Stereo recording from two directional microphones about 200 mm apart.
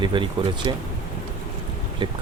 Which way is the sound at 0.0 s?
25° right (ahead or behind).